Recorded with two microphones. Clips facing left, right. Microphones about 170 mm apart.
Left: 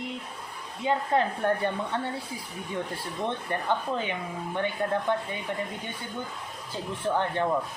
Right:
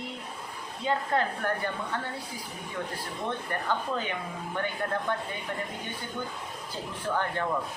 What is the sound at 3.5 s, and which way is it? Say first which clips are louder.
Speech: left 2 dB; 25° left (ahead or behind).